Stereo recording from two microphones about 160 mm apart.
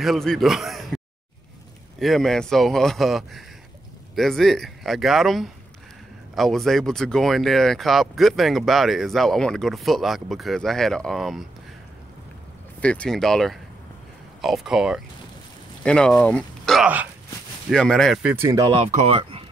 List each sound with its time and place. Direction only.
0.0 s speech: centre (ahead or behind)
12.8 s speech: 5° left (ahead or behind)
16.8 s speech: 10° right (ahead or behind)
17.6 s speech: 5° left (ahead or behind)
18.2 s speech: 15° right (ahead or behind)
18.7 s speech: 45° right (ahead or behind)